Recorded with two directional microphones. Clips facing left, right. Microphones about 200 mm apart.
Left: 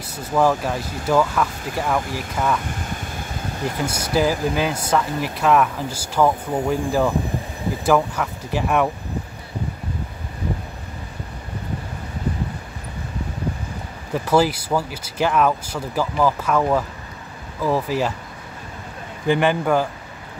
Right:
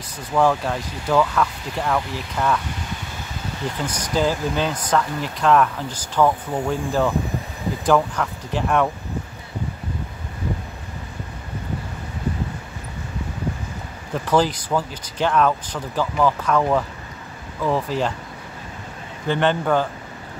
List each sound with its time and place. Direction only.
0.3 s speech: 5° left (ahead or behind)
2.6 s a sound: 50° left (ahead or behind)
3.6 s speech: 10° left (ahead or behind)
14.1 s speech: 10° left (ahead or behind)
19.2 s speech: 10° left (ahead or behind)